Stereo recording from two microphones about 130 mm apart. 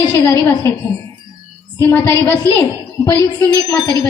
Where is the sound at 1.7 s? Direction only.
20° left (ahead or behind).